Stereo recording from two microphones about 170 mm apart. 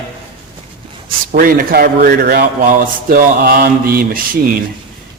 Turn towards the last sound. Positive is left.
turn(degrees=-55)  # may be behind; listen again after turning